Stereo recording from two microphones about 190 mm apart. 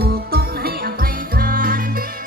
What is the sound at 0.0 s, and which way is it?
Music, 55° right (ahead or behind).